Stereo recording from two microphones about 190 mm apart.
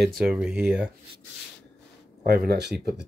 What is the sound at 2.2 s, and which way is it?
Speech, 60° right (ahead or behind).